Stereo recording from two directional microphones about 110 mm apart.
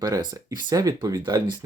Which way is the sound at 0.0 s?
40° right (ahead or behind).